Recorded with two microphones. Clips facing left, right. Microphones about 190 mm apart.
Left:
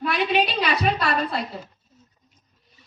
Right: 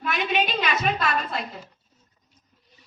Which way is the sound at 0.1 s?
35° left (ahead or behind).